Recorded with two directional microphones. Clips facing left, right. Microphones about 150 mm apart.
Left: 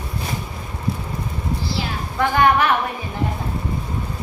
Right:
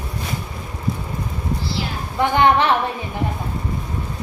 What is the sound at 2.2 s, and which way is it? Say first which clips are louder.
Speech: right 1 dB; 25° right (ahead or behind).